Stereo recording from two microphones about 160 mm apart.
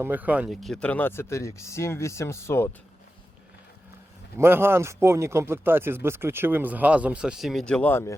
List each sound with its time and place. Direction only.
0.0 s speech: 10° right (ahead or behind)
0.5 s speech: 5° left (ahead or behind)
4.4 s speech: 15° right (ahead or behind); by 8.1 s 15° left (ahead or behind)